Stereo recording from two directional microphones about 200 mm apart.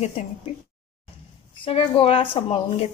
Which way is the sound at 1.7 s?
30° left (ahead or behind).